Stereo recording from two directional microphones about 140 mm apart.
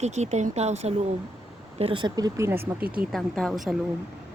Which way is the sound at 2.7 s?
90° right.